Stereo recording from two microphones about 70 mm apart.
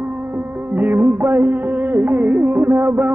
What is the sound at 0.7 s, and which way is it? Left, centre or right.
Music, right.